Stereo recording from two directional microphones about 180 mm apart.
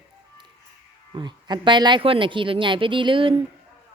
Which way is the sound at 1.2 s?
25° right (ahead or behind).